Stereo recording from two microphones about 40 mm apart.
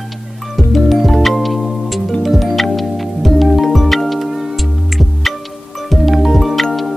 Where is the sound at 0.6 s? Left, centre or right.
Centre.